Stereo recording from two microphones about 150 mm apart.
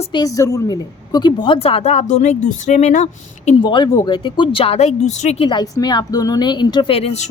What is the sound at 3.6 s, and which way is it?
A woman's voice, 30° left (ahead or behind).